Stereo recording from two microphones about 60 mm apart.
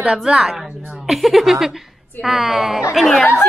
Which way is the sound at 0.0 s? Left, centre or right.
Centre.